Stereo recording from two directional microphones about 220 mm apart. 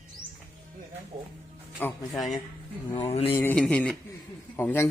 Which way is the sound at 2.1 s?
Centre (ahead or behind).